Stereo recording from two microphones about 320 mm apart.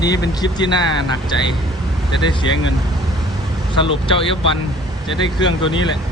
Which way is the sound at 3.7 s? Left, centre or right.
Centre.